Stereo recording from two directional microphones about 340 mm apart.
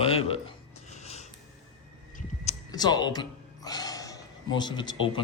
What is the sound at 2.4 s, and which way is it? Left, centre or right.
Speech, centre.